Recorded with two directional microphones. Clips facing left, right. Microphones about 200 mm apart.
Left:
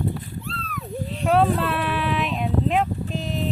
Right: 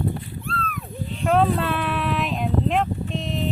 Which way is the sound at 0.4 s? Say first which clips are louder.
Right 4 dB; 50° right (ahead or behind).